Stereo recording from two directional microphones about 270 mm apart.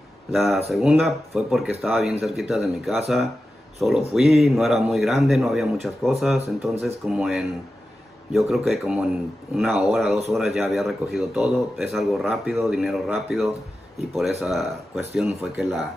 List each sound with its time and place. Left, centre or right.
0.3 s speech: centre